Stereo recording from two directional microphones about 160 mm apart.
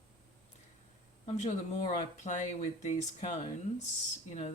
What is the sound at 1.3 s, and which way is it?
Speech, 45° left (ahead or behind).